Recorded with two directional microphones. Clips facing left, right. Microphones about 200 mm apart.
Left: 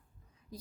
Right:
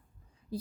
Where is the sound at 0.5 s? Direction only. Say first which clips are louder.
Right 10 dB; 30° right (ahead or behind).